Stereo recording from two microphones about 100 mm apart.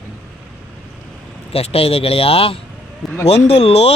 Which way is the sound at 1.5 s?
80° left.